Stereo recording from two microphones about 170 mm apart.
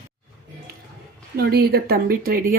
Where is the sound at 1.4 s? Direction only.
65° right (ahead or behind).